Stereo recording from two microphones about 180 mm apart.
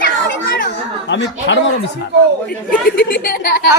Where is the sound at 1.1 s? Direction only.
85° left.